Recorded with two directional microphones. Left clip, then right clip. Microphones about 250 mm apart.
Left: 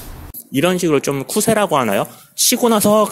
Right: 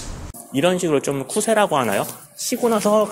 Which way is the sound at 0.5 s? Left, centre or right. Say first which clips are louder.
Left 3 dB; left.